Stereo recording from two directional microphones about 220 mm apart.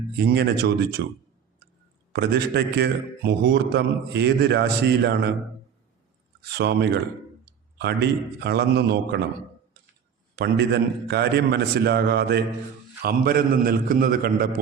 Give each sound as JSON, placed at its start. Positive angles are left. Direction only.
{"t": 0.3, "sound": "a man's voice", "side_deg": -50}
{"t": 2.1, "sound": "a man's voice", "side_deg": -50}
{"t": 6.4, "sound": "a man's voice", "side_deg": -45}
{"t": 10.3, "sound": "a man's voice", "side_deg": -50}